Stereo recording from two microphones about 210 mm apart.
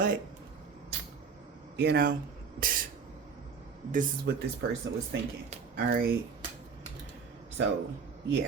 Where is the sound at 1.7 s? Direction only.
50° right (ahead or behind).